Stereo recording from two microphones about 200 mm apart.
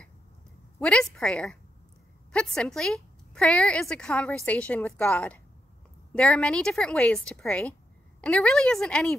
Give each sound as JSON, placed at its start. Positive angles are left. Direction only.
{"t": 0.7, "sound": "a woman's voice", "side_deg": 5}